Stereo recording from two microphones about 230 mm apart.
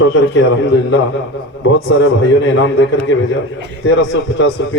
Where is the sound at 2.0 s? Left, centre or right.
Left.